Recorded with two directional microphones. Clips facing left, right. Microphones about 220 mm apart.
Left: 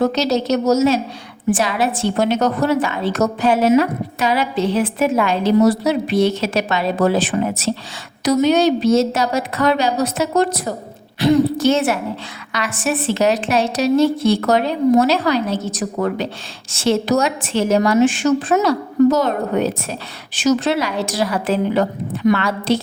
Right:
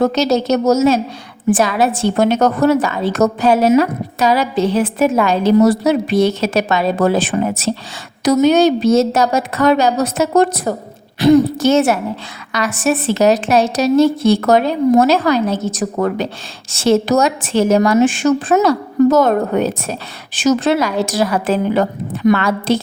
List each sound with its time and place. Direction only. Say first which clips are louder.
0.1 s a woman's voice: right 3 dB; 45° right (ahead or behind)